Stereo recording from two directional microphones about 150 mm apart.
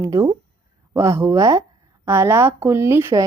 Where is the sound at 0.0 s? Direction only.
25° right (ahead or behind).